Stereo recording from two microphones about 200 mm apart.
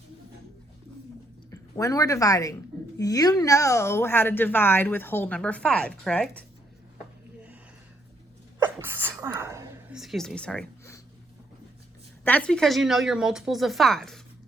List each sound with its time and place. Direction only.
1.5 s a woman's voice: 15° left (ahead or behind)
8.5 s sneeze: 10° right (ahead or behind)
9.9 s speech: centre (ahead or behind)
12.2 s speech: 5° left (ahead or behind)